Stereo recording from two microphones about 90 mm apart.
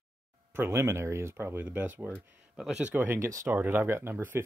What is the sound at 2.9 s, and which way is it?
Speech, 25° right (ahead or behind).